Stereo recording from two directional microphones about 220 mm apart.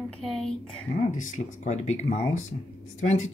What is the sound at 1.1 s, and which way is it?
Speech, 35° left (ahead or behind).